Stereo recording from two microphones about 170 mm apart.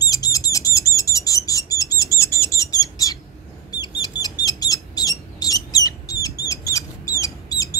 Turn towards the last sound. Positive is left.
turn(degrees=20)  # may be behind; listen again after turning